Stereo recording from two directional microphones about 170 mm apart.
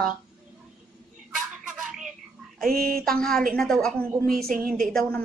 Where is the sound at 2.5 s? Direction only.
55° right (ahead or behind).